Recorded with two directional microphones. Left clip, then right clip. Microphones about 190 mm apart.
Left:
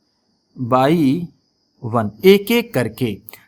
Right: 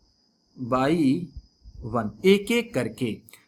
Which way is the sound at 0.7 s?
35° left (ahead or behind).